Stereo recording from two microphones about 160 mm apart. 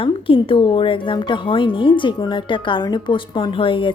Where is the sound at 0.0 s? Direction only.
35° left (ahead or behind).